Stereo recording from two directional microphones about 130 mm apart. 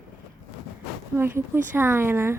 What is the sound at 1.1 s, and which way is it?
Speech, 15° right (ahead or behind).